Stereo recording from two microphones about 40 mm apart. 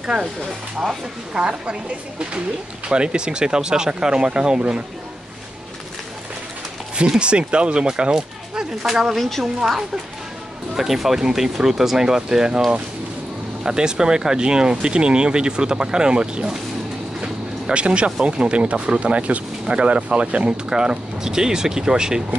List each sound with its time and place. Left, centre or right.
0.0 s speech: right
1.3 s speech: right
7.2 s speech: right
9.1 s speech: centre
9.4 s speech: centre
13.7 s speech: centre
17.7 s speech: right